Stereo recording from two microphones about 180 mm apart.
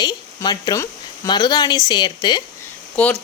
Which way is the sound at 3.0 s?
10° left (ahead or behind).